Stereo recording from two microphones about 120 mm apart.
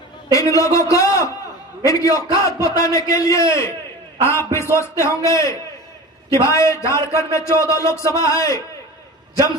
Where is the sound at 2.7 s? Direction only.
30° left (ahead or behind).